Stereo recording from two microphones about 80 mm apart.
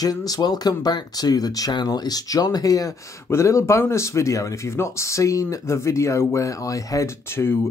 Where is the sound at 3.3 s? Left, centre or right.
Left.